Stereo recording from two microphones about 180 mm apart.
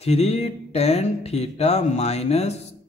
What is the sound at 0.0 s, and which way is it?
A man's voice, 35° left (ahead or behind).